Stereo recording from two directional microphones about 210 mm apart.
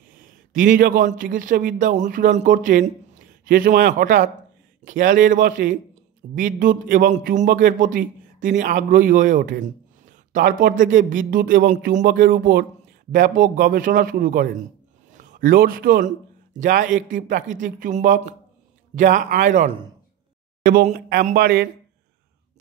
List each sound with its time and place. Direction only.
0.5 s a man's voice: 40° right (ahead or behind)